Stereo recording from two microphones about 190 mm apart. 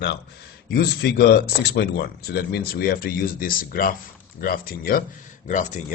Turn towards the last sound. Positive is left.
turn(degrees=40)  # may be behind; listen again after turning